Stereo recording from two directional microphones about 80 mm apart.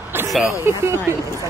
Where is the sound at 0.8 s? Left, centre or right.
Right.